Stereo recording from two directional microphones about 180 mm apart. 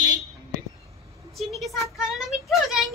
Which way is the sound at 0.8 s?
15° right (ahead or behind).